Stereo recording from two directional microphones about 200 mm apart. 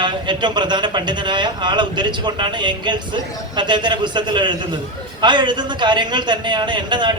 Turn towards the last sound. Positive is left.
turn(degrees=-20)  # may be behind; listen again after turning